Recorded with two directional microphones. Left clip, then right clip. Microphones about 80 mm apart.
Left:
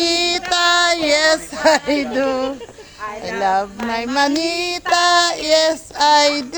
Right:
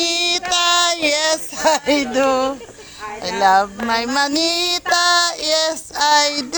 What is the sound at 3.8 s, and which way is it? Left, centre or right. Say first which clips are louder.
Child singing: even; centre.